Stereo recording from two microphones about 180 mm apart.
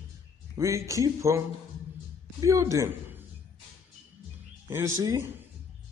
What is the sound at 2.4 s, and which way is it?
Speech, 15° right (ahead or behind).